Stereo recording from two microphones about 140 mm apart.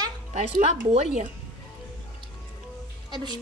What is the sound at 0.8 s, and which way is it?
Speech, 50° right (ahead or behind).